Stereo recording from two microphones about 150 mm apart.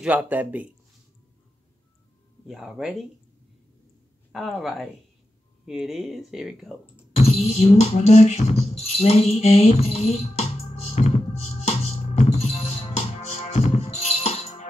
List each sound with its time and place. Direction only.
0.0 s speech: 10° right (ahead or behind)
2.4 s speech: 5° right (ahead or behind)
4.3 s speech: 5° right (ahead or behind)
7.2 s music: 45° left (ahead or behind)